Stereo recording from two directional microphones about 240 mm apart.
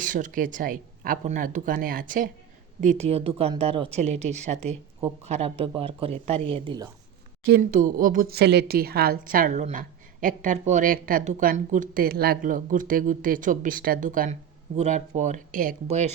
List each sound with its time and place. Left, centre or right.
0.0 s speech: right
7.4 s speech: right